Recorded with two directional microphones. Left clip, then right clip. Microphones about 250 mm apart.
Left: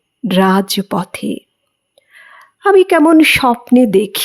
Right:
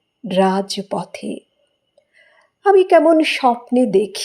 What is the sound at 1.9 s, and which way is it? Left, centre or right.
Whispering, left.